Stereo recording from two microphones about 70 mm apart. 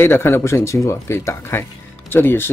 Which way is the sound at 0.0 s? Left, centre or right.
Left.